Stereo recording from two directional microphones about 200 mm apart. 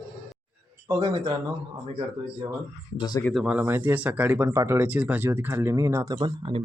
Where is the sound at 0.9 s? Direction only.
15° right (ahead or behind).